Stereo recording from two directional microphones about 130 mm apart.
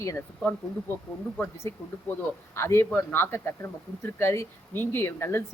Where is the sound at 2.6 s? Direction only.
20° left (ahead or behind).